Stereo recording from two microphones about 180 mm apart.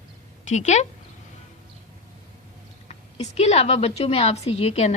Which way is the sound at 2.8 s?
35° left (ahead or behind).